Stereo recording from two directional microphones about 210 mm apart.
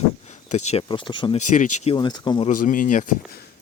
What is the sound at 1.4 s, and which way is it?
Speech, 35° left (ahead or behind).